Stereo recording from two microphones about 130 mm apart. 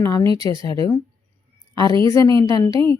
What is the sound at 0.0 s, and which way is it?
Speech, 20° left (ahead or behind).